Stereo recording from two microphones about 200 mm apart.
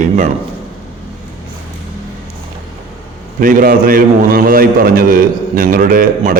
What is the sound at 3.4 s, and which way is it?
A man's voice, 45° right (ahead or behind).